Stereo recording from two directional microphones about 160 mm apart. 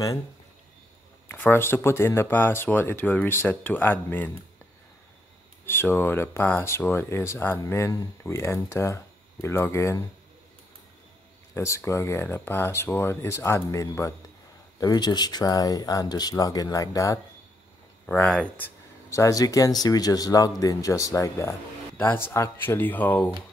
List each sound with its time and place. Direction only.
1.3 s speech: 15° left (ahead or behind)
5.7 s speech: 15° left (ahead or behind)
11.5 s speech: 15° left (ahead or behind)
18.0 s speech: 10° left (ahead or behind)
19.0 s speech: 20° left (ahead or behind)